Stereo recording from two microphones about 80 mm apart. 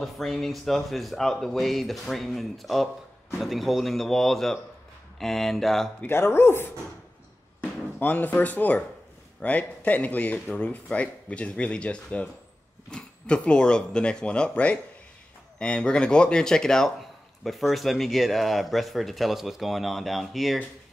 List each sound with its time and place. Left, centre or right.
0.0 s speech: centre
6.0 s speech: left
8.0 s speech: left; by 20.5 s centre